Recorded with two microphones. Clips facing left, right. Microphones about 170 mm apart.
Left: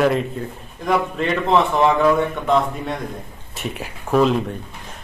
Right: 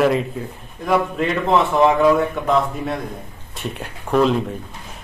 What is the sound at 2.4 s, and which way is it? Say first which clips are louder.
Speech: right 1 dB; 5° right (ahead or behind).